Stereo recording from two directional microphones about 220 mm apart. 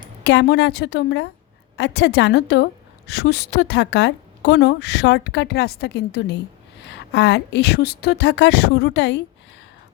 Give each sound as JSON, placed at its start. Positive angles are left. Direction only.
{"t": 0.3, "sound": "a woman's voice", "side_deg": 50}